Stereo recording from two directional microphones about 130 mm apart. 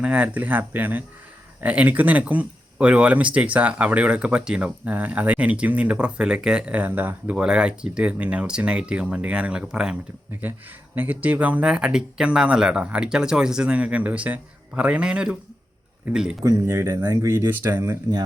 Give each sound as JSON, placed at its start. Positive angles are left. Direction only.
{"t": 0.0, "sound": "speech", "side_deg": -10}
{"t": 16.4, "sound": "speech", "side_deg": -25}